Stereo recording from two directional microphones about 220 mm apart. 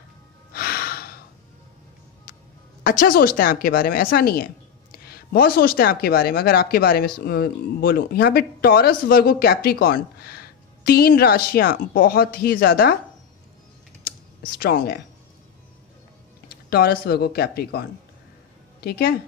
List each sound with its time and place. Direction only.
0.5 s gasp: 45° left (ahead or behind)
2.8 s a woman's voice: 40° left (ahead or behind)
14.0 s computer keyboard: 40° left (ahead or behind)
16.7 s a woman's voice: 45° left (ahead or behind)